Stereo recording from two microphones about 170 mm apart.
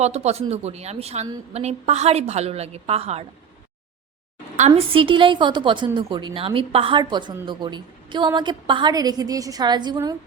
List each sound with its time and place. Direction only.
0.0 s a woman's voice: 40° right (ahead or behind)
4.5 s a woman's voice: 40° right (ahead or behind)